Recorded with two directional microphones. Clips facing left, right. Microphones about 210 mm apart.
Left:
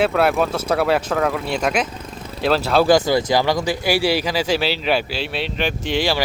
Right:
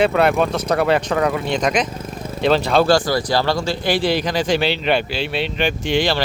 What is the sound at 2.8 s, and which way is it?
Speech, 20° left (ahead or behind).